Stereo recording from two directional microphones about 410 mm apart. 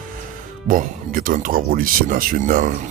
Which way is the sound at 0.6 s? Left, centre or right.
Centre.